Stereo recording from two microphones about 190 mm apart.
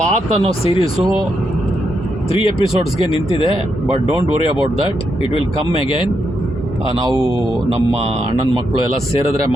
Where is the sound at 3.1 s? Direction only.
30° left (ahead or behind).